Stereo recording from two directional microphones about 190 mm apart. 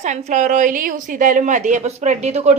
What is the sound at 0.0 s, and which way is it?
Speech, 40° right (ahead or behind).